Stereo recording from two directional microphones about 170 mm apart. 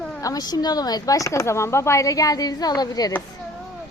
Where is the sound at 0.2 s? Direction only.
20° left (ahead or behind).